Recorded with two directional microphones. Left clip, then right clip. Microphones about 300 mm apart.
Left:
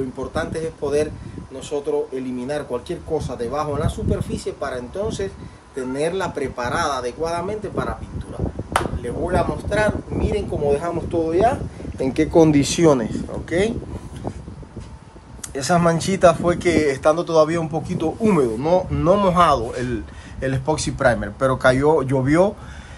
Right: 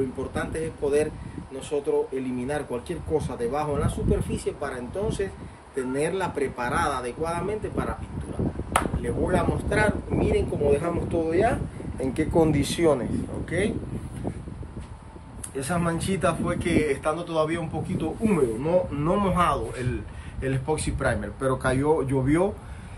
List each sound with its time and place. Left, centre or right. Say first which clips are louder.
0.3 s speech: left 5 dB; centre
9.0 s speech: left 4 dB; centre
12.0 s speech: left 7 dB; left
15.5 s speech: left 10 dB; centre